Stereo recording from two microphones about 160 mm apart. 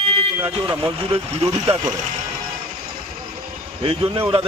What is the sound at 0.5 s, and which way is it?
Speech, 35° right (ahead or behind).